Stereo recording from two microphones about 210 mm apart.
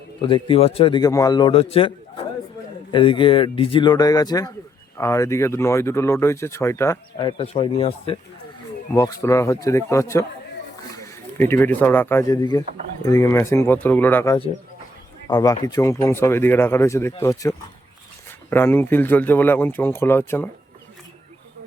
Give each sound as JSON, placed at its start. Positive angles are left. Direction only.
{"t": 0.2, "sound": "a man's voice", "side_deg": 25}
{"t": 2.9, "sound": "a man's voice", "side_deg": 25}
{"t": 8.9, "sound": "speech", "side_deg": 15}
{"t": 18.5, "sound": "speech", "side_deg": 10}